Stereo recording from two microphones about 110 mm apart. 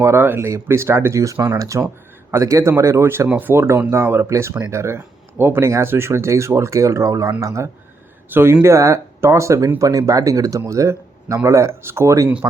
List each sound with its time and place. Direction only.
0.0 s speech: 25° right (ahead or behind)